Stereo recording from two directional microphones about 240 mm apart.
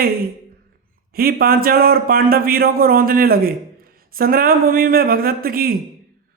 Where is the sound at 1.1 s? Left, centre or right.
Right.